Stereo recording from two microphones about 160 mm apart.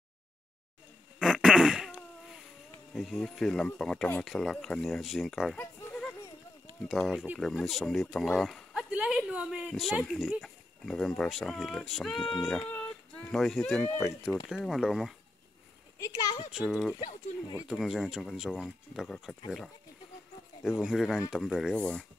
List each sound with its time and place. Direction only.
1.2 s fart: 5° right (ahead or behind)
2.9 s speech: centre (ahead or behind)
5.6 s a sound: 10° left (ahead or behind)
6.9 s speech: centre (ahead or behind)
14.5 s speech: centre (ahead or behind)
16.0 s speech: 20° left (ahead or behind)
16.5 s speech: centre (ahead or behind)
20.6 s speech: 5° right (ahead or behind)